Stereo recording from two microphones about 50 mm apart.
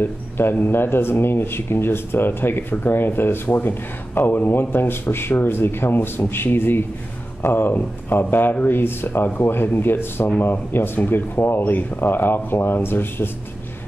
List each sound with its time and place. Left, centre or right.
0.0 s speech: left